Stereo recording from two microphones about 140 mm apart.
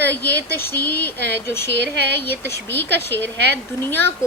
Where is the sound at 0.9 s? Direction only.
15° left (ahead or behind).